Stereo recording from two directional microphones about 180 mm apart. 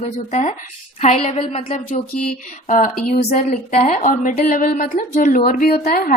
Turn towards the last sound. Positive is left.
turn(degrees=50)  # may be behind; listen again after turning